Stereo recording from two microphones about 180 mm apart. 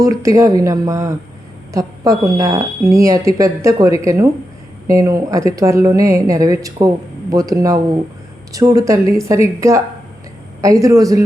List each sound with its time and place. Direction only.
0.0 s a woman's voice: 20° right (ahead or behind)